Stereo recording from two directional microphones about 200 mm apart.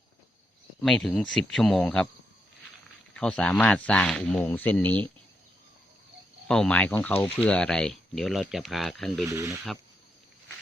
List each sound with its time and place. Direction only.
0.8 s speech: centre (ahead or behind)
3.2 s speech: 5° left (ahead or behind)
6.5 s speech: 5° left (ahead or behind)
9.2 s speech: 15° right (ahead or behind)